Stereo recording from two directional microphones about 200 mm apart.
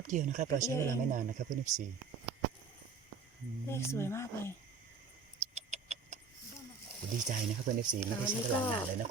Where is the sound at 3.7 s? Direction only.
15° left (ahead or behind).